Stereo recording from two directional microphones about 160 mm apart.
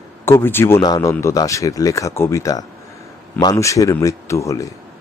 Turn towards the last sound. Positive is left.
turn(degrees=20)  # may be behind; listen again after turning